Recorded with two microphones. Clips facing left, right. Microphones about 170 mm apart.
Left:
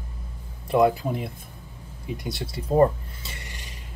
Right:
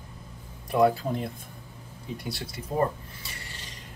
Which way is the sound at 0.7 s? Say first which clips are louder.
Left 2 dB; 20° left (ahead or behind).